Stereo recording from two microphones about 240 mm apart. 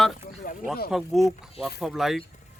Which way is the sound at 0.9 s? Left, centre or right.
Centre.